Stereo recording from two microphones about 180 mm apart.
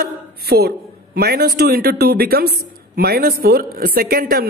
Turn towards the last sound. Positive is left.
turn(degrees=-55)  # may be behind; listen again after turning